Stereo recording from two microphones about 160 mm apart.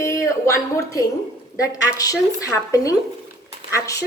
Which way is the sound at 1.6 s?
20° left (ahead or behind).